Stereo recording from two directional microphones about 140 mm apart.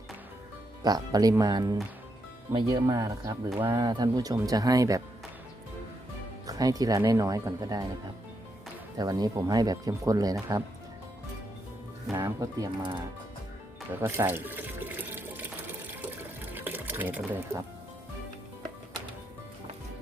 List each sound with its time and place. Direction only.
0.8 s speech: 30° right (ahead or behind)
6.5 s speech: 25° right (ahead or behind)
9.0 s speech: 30° right (ahead or behind)
12.1 s speech: 25° right (ahead or behind)
14.0 s water: 15° right (ahead or behind)
16.6 s water: 15° right (ahead or behind)